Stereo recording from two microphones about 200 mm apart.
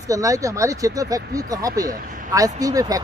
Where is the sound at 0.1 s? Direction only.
15° right (ahead or behind).